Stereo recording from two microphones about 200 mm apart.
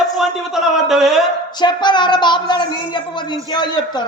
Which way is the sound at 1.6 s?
20° left (ahead or behind).